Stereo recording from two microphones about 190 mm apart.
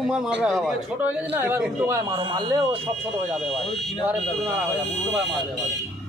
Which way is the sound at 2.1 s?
25° right (ahead or behind).